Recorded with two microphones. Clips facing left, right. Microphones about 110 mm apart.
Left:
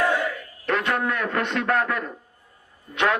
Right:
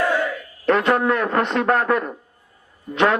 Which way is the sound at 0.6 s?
35° right (ahead or behind).